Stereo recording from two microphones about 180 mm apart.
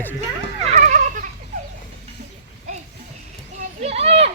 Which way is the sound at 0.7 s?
40° right (ahead or behind).